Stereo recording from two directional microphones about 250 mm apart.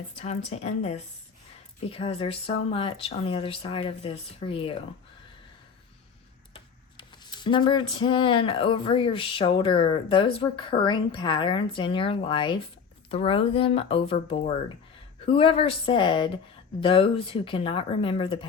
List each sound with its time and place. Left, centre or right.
0.2 s speech: left
6.5 s a sound: centre
10.3 s speech: left